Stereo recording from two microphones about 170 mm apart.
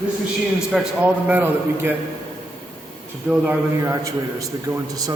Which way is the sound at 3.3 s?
15° right (ahead or behind).